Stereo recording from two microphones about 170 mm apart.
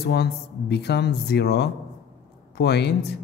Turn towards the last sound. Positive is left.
turn(degrees=75)  # may be behind; listen again after turning